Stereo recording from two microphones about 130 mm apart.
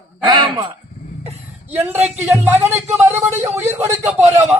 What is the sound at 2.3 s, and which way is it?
A man's voice, 20° right (ahead or behind).